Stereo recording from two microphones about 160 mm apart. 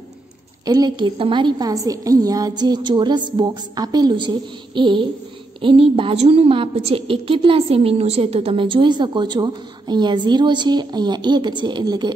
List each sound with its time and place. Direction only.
0.7 s a woman's voice: 25° right (ahead or behind)